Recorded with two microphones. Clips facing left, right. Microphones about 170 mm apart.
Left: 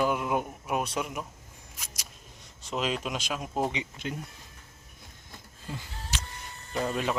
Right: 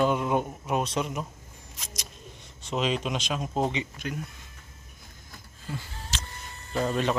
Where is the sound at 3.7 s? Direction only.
20° left (ahead or behind).